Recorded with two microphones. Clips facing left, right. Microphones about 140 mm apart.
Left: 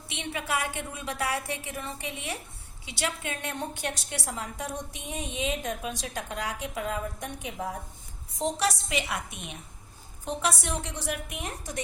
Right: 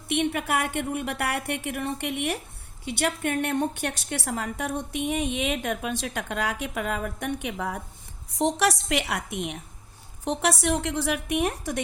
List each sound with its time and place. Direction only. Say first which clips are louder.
0.1 s a woman's voice: right 7 dB; 60° right (ahead or behind)